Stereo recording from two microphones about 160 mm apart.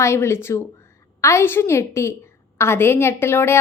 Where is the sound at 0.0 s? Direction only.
15° left (ahead or behind).